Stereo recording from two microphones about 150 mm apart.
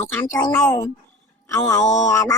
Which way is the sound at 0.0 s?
20° left (ahead or behind).